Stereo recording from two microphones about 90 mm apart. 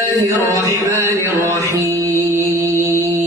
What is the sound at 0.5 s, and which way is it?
Music, 35° right (ahead or behind).